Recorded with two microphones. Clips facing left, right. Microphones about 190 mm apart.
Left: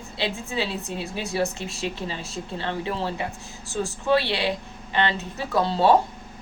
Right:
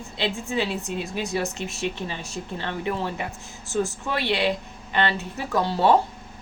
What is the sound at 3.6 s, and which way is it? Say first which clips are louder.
A woman's voice: left 2 dB; 20° right (ahead or behind).